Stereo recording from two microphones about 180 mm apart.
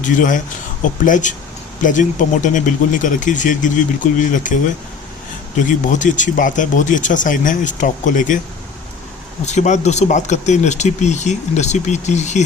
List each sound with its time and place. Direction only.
0.0 s speech: 45° left (ahead or behind)
5.5 s speech: 45° left (ahead or behind)
9.5 s speech: 40° left (ahead or behind)